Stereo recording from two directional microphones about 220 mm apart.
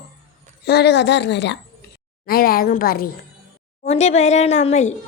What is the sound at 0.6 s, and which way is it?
A woman's voice, 50° left (ahead or behind).